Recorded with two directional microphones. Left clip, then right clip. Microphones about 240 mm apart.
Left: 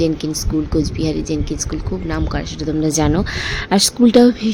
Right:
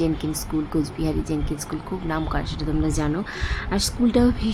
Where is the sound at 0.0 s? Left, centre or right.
Centre.